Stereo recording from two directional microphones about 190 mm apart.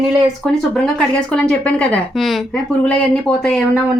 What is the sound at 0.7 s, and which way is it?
Speech, 5° left (ahead or behind).